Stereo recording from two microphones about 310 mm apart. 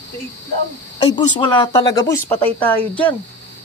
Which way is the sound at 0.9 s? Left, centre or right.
Centre.